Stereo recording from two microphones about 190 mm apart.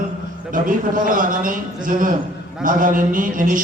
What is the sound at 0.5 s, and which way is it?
A man's voice, 45° right (ahead or behind).